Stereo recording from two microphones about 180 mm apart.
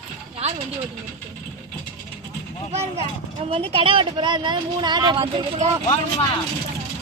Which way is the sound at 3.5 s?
30° right (ahead or behind).